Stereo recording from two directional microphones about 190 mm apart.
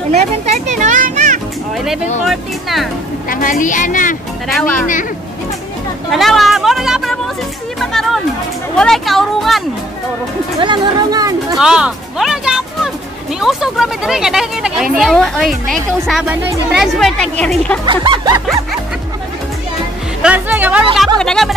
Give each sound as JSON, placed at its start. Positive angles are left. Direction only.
{"t": 0.7, "sound": "children playing", "side_deg": -40}
{"t": 2.2, "sound": "speech", "side_deg": 0}
{"t": 3.3, "sound": "a woman's voice", "side_deg": 45}
{"t": 4.5, "sound": "speech", "side_deg": 0}
{"t": 6.1, "sound": "speech", "side_deg": 0}
{"t": 10.6, "sound": "speech", "side_deg": -25}
{"t": 11.5, "sound": "speech", "side_deg": -5}
{"t": 17.8, "sound": "speech", "side_deg": -25}
{"t": 20.2, "sound": "speech", "side_deg": -5}